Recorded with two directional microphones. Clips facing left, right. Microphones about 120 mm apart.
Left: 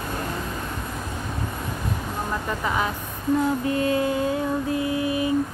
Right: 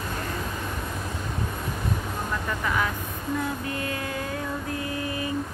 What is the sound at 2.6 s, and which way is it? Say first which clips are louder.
Vehicle: left 2 dB; 25° left (ahead or behind).